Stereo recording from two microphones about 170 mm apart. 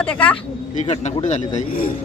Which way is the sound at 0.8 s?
45° left (ahead or behind).